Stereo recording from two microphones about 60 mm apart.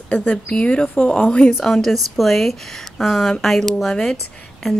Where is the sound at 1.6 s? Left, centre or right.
Centre.